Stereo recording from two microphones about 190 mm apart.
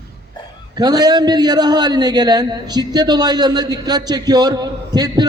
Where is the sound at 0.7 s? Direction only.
20° right (ahead or behind).